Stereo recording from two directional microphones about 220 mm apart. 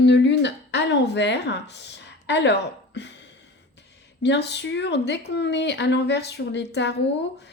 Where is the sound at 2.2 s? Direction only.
50° left (ahead or behind).